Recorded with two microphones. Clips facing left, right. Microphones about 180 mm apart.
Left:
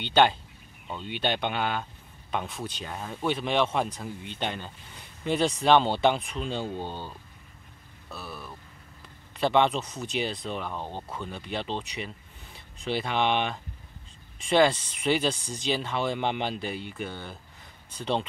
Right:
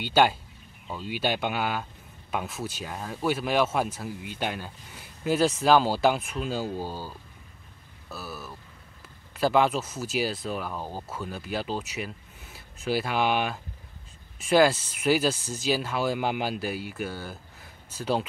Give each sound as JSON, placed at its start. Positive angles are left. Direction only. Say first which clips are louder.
{"t": 0.0, "sound": "speech", "louder": "even", "side_deg": -5}
{"t": 8.1, "sound": "a sound", "louder": "right 2 dB", "side_deg": -5}
{"t": 9.3, "sound": "speech", "louder": "right 1 dB", "side_deg": -5}